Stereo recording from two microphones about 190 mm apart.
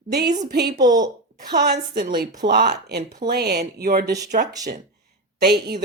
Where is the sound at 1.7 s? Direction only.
50° right (ahead or behind).